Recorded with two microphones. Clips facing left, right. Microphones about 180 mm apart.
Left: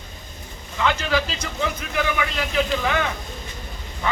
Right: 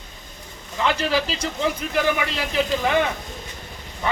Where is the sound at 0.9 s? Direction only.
35° right (ahead or behind).